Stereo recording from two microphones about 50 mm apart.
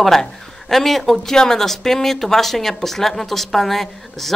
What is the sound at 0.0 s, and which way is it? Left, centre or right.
Speech, centre.